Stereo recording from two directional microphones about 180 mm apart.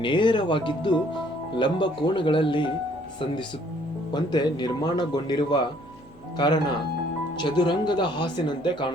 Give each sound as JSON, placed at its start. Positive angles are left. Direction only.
{"t": 0.0, "sound": "speech", "side_deg": 25}
{"t": 4.1, "sound": "speech", "side_deg": 25}